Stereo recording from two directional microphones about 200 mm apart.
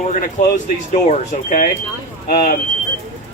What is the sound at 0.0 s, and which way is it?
Speech, 40° left (ahead or behind).